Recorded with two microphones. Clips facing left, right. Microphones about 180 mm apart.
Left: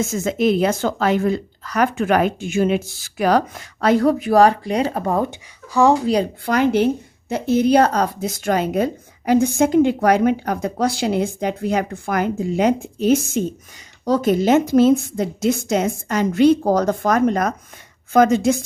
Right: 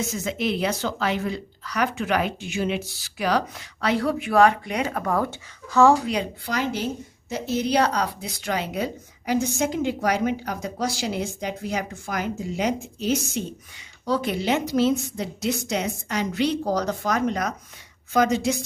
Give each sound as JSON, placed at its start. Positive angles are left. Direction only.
{"t": 0.0, "sound": "a woman's voice", "side_deg": 50}
{"t": 6.4, "sound": "a woman's voice", "side_deg": 55}